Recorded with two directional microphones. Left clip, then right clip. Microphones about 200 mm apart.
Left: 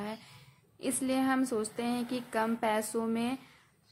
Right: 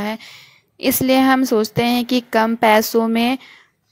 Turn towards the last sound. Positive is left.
turn(degrees=-45)  # may be behind; listen again after turning